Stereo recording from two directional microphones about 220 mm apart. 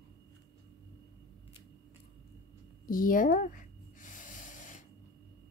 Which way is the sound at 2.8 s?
40° left (ahead or behind).